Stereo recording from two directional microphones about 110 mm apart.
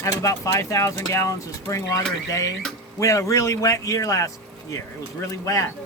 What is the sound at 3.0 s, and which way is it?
Speech, 30° left (ahead or behind).